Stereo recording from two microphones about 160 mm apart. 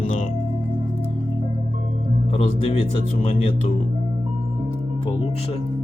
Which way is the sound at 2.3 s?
40° left (ahead or behind).